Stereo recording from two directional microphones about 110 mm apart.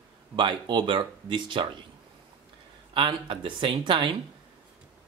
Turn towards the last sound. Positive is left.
turn(degrees=-50)  # may be behind; listen again after turning